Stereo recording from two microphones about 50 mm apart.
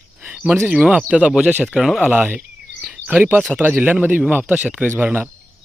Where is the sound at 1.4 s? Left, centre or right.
Right.